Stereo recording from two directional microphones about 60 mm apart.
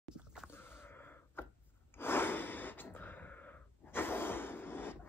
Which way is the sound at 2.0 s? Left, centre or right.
Left.